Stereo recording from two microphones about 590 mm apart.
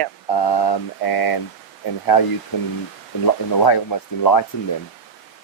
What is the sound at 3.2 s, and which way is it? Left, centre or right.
Speech, left.